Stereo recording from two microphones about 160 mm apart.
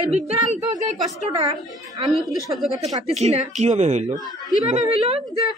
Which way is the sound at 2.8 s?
45° right (ahead or behind).